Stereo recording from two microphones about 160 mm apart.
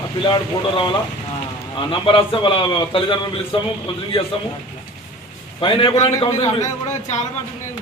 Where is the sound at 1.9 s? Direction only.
35° left (ahead or behind).